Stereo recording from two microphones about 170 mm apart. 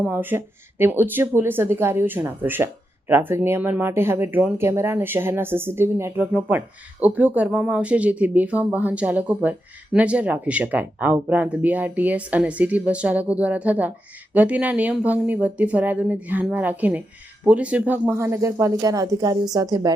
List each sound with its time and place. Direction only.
0.0 s speech: 10° right (ahead or behind)